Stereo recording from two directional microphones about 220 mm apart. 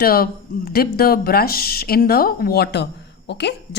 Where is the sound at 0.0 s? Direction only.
40° left (ahead or behind).